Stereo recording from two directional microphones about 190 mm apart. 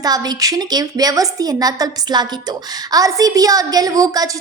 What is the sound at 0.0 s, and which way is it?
A woman's voice, 20° right (ahead or behind).